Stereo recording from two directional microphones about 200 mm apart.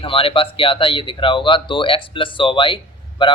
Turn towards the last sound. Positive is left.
turn(degrees=25)  # may be behind; listen again after turning